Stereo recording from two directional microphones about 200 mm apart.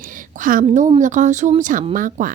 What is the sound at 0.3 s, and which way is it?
A woman's voice, 40° right (ahead or behind).